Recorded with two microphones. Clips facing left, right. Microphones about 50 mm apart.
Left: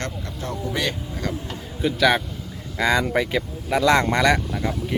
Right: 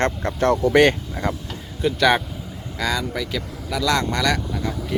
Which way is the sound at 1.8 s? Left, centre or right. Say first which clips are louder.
Right 1 dB; centre.